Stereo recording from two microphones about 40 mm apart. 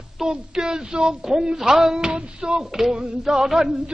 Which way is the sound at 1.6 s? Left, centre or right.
Centre.